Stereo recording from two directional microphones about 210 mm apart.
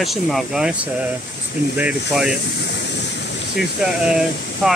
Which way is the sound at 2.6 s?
55° left (ahead or behind).